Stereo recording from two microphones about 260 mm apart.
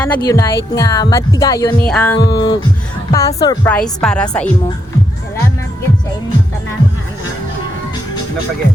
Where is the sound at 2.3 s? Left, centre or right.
Centre.